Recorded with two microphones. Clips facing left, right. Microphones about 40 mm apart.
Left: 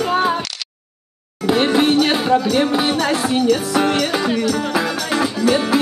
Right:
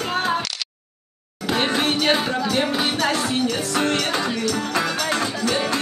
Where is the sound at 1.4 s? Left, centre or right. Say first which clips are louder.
Left 6 dB; centre.